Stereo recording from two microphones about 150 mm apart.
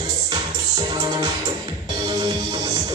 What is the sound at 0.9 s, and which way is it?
Music, 30° right (ahead or behind).